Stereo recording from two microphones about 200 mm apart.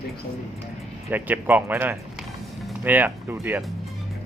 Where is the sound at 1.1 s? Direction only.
10° right (ahead or behind).